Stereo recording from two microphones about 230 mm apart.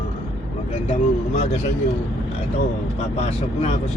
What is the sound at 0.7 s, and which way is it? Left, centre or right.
Vehicle, left.